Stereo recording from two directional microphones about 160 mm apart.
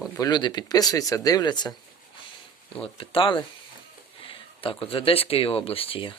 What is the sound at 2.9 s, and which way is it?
Speech, 35° left (ahead or behind).